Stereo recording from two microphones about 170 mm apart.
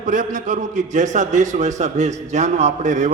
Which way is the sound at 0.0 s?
50° right (ahead or behind).